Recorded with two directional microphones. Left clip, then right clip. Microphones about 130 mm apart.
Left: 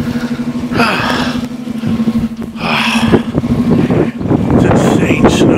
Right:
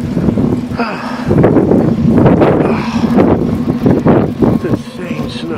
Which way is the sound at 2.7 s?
50° left (ahead or behind).